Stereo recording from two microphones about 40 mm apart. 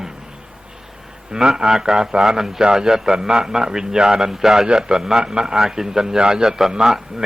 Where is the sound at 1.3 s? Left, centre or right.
Centre.